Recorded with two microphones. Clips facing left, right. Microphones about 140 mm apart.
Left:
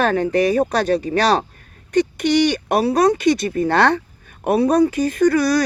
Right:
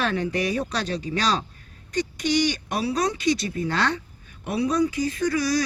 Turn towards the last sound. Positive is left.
turn(degrees=65)  # may be behind; listen again after turning